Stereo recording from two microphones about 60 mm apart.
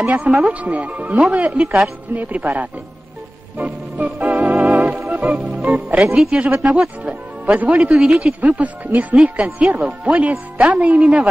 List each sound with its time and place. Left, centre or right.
0.0 s speech: right
3.5 s organ: right
5.7 s a man's voice: right
7.9 s speech: centre